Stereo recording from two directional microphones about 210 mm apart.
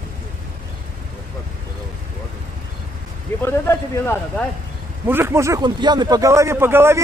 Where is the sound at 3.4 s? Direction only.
10° left (ahead or behind).